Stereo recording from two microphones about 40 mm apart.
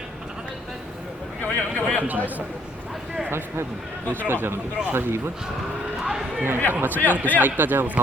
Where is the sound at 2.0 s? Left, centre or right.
Right.